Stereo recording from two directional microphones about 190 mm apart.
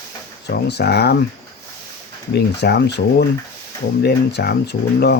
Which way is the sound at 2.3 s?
60° left (ahead or behind).